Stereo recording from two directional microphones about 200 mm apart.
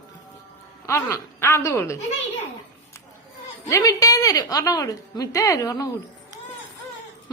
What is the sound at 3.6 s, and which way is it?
A woman's voice, 15° left (ahead or behind).